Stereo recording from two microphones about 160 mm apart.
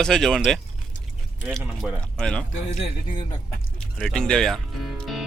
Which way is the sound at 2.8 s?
30° left (ahead or behind).